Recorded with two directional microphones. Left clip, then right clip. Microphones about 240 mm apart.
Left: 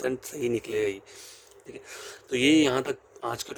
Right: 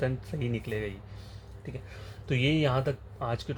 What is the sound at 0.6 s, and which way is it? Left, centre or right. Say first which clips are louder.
Speech: left 7 dB; left.